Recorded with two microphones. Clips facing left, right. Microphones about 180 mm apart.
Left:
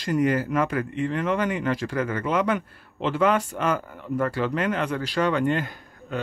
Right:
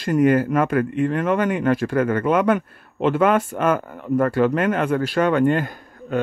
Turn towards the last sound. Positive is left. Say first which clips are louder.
# right 7 dB
turn(degrees=-50)  # may be behind; listen again after turning